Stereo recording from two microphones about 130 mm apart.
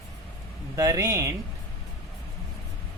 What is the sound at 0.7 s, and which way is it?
Speech, 25° right (ahead or behind).